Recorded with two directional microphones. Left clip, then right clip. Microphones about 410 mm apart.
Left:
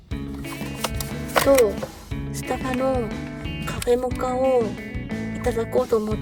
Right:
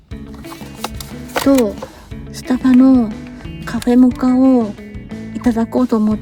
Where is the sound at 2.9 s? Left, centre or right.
Centre.